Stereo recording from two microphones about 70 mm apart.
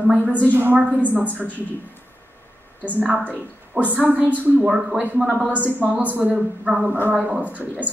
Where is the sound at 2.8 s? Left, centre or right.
Right.